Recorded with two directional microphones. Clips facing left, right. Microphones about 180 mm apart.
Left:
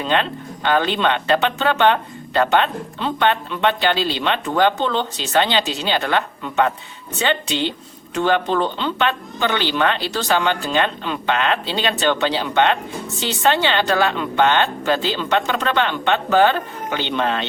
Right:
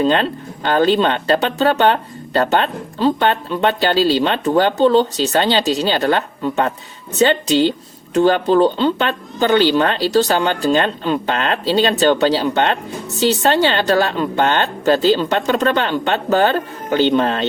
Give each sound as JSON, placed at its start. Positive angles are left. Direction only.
{"t": 0.0, "sound": "speech", "side_deg": -40}